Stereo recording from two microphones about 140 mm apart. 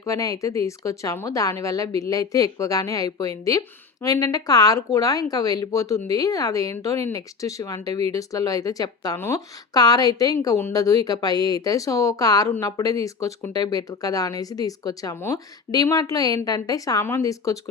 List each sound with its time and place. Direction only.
0.0 s a woman's voice: 25° left (ahead or behind)
9.7 s a woman's voice: 30° left (ahead or behind)
15.7 s a woman's voice: 25° left (ahead or behind)